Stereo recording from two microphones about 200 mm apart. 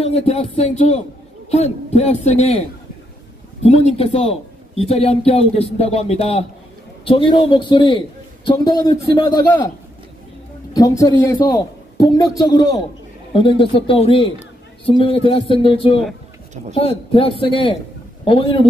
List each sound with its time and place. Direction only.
0.0 s speech: 30° left (ahead or behind)
3.6 s a man's voice: 30° left (ahead or behind)
10.7 s a man's voice: 20° left (ahead or behind)